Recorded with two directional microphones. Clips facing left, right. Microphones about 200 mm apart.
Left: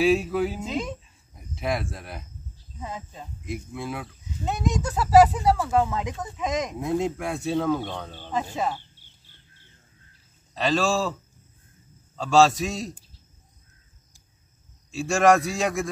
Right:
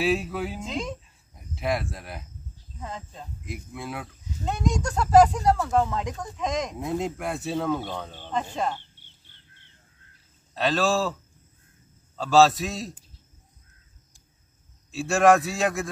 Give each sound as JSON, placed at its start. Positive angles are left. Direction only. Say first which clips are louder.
{"t": 0.0, "sound": "speech", "louder": "left 4 dB", "side_deg": 0}
{"t": 8.3, "sound": "speech", "louder": "left 1 dB", "side_deg": 5}
{"t": 10.5, "sound": "speech", "louder": "even", "side_deg": 0}
{"t": 12.2, "sound": "speech", "louder": "even", "side_deg": 0}
{"t": 14.9, "sound": "speech", "louder": "even", "side_deg": 0}